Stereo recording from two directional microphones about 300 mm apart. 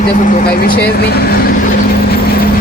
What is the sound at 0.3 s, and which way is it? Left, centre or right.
Speech, left.